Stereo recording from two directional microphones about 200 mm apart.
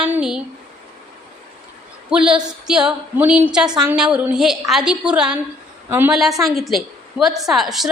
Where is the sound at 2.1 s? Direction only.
5° right (ahead or behind).